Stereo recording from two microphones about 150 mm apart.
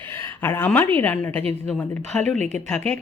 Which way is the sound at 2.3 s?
50° right (ahead or behind).